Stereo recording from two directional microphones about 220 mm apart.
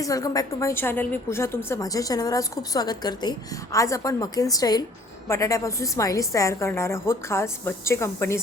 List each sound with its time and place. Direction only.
0.0 s a woman's voice: 15° left (ahead or behind)